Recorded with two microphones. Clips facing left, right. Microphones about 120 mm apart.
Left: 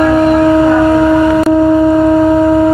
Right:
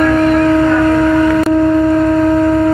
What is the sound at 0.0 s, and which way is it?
Foghorn, 15° left (ahead or behind).